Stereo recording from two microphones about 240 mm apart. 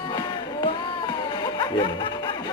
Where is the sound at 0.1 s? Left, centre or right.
Left.